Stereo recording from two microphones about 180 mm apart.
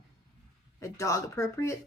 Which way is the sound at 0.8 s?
15° left (ahead or behind).